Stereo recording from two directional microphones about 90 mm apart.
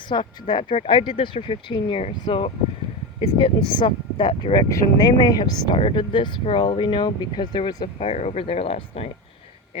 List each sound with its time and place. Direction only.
0.1 s speech: 60° left (ahead or behind)
4.5 s speech: 45° left (ahead or behind)
5.8 s speech: 65° left (ahead or behind)
7.9 s speech: 90° left